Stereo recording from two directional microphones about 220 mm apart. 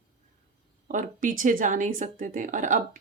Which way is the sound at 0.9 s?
35° right (ahead or behind).